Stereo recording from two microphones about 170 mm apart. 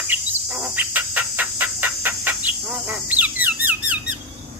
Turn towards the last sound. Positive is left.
turn(degrees=-10)  # may be behind; listen again after turning